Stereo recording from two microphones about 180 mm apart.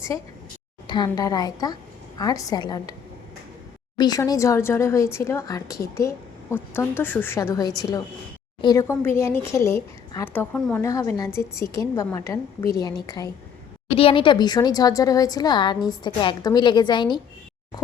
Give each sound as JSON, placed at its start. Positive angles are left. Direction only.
{"t": 0.9, "sound": "a woman's voice", "side_deg": 25}
{"t": 3.9, "sound": "a woman's voice", "side_deg": 20}
{"t": 13.9, "sound": "a woman's voice", "side_deg": 30}